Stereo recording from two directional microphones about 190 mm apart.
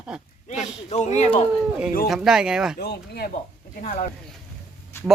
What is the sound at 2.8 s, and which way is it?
Speech, 55° left (ahead or behind).